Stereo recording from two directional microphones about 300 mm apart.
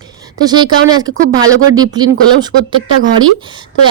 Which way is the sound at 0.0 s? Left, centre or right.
Centre.